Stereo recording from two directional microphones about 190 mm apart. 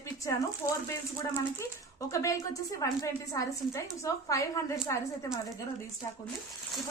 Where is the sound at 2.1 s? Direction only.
15° left (ahead or behind).